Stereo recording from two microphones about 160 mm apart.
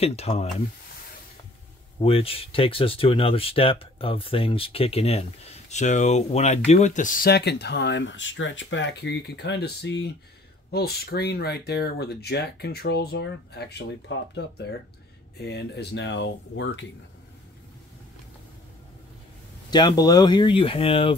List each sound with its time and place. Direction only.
0.0 s speech: 40° left (ahead or behind)
2.0 s speech: 35° left (ahead or behind); by 13.8 s 90° left
15.3 s speech: 90° left
19.7 s speech: 25° left (ahead or behind)